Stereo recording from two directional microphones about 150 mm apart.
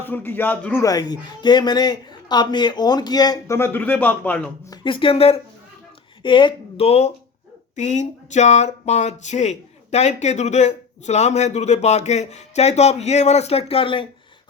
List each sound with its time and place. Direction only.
0.0 s a man's voice: 15° left (ahead or behind)
4.7 s speech: 35° left (ahead or behind)